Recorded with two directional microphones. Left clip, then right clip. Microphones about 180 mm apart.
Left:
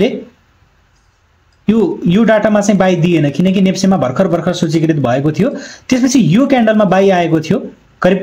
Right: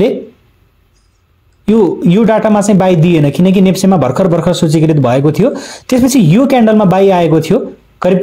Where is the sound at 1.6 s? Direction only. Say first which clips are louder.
Right 4 dB; 35° right (ahead or behind).